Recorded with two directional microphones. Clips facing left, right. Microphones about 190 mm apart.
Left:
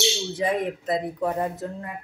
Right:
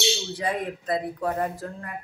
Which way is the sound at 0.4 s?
20° left (ahead or behind).